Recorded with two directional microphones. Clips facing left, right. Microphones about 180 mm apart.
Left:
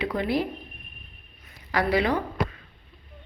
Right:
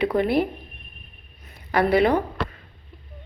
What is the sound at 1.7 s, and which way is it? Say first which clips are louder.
Speech: right 5 dB; 55° right (ahead or behind).